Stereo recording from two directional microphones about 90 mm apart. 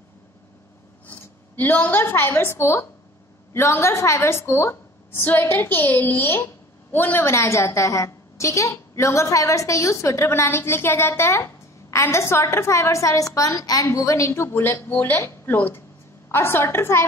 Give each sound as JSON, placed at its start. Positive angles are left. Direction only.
{"t": 1.0, "sound": "a woman's voice", "side_deg": 20}